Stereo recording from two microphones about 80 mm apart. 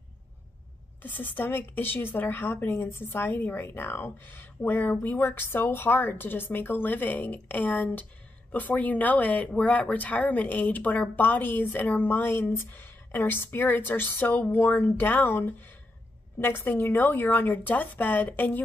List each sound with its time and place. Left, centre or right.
1.0 s speech: left